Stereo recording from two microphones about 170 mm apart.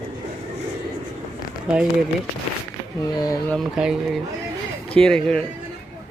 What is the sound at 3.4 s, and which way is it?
Speech, centre (ahead or behind).